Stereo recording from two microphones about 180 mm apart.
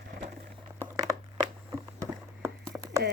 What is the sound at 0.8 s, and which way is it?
Crushing, 20° right (ahead or behind).